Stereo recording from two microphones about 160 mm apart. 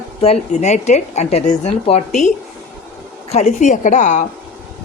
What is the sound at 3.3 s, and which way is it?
Speech, 45° left (ahead or behind).